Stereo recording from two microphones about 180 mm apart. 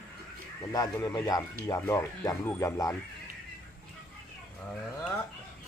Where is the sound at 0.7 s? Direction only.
20° left (ahead or behind).